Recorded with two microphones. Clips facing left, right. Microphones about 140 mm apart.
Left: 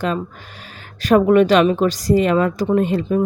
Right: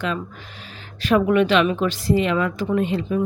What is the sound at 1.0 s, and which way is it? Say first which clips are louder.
A woman's voice: left 5 dB; 40° left (ahead or behind).